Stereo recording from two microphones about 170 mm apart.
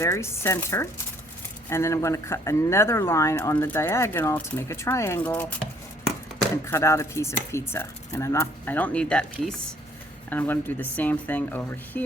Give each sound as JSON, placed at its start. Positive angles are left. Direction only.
{"t": 0.0, "sound": "speech", "side_deg": 15}
{"t": 6.7, "sound": "speech", "side_deg": 15}